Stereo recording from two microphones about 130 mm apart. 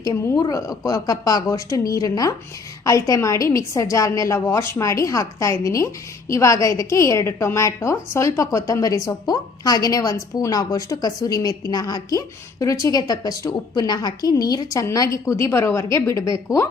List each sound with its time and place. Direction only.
0.0 s a woman's voice: 30° left (ahead or behind)